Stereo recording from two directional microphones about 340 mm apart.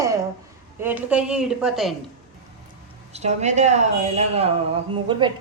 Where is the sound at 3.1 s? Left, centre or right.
Centre.